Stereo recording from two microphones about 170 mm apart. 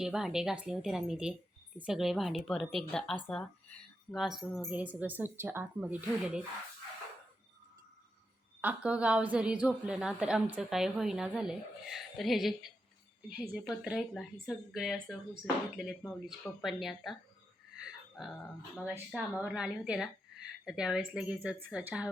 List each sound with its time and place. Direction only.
0.0 s speech: 5° right (ahead or behind)
4.8 s speech: 10° right (ahead or behind)
8.6 s speech: 5° right (ahead or behind)
18.9 s speech: 10° right (ahead or behind)